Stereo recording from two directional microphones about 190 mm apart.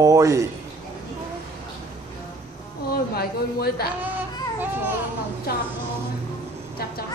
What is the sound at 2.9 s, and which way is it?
Speech, 55° left (ahead or behind).